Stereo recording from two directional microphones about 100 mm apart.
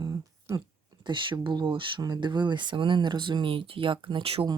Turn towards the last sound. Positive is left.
turn(degrees=-70)  # may be behind; listen again after turning